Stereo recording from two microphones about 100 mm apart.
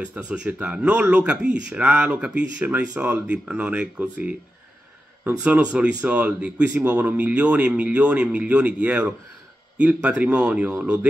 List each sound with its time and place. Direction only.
0.0 s speech: 10° right (ahead or behind)